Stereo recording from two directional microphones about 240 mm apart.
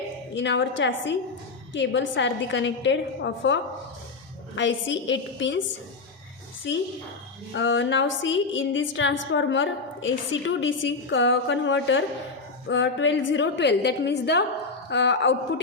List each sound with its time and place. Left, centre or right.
0.3 s a woman's voice: left
7.5 s a woman's voice: left